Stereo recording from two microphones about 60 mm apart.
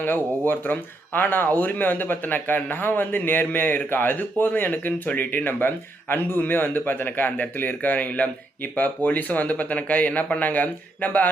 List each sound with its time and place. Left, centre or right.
0.0 s speech: left